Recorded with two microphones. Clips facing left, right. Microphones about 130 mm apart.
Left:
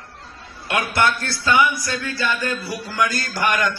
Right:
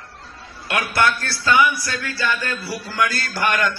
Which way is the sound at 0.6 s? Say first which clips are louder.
Even; 20° left (ahead or behind).